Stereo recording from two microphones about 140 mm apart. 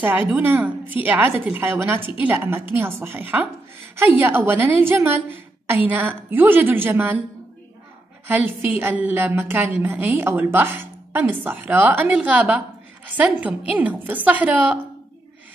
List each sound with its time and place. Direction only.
0.0 s a woman's voice: 15° right (ahead or behind)
8.3 s a woman's voice: 15° right (ahead or behind)